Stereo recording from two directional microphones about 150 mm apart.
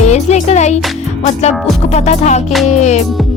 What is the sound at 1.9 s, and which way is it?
Music, 50° left (ahead or behind).